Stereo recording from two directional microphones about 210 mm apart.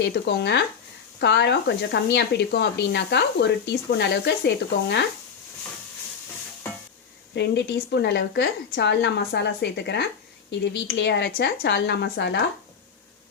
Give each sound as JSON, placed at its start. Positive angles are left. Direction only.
{"t": 0.0, "sound": "speech", "side_deg": 50}
{"t": 7.3, "sound": "speech", "side_deg": 55}